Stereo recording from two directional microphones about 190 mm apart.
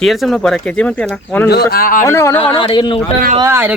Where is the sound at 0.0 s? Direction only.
Centre (ahead or behind).